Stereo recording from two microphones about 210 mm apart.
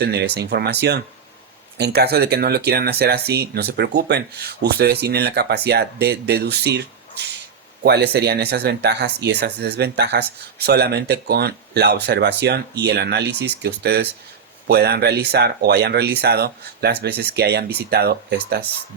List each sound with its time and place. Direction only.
0.0 s speech: 50° right (ahead or behind)
7.9 s speech: 50° right (ahead or behind)